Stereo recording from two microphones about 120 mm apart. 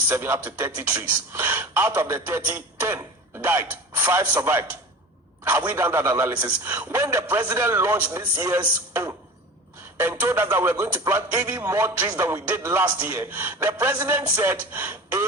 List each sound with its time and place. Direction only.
0.1 s a man's voice: 20° right (ahead or behind)